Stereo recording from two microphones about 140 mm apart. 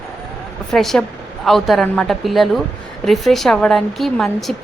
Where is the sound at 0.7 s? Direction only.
Centre (ahead or behind).